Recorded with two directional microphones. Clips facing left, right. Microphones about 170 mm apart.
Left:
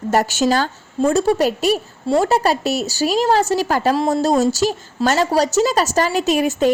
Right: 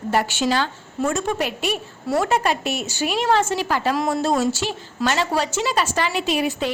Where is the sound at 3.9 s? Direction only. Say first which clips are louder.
Left 4 dB; 30° left (ahead or behind).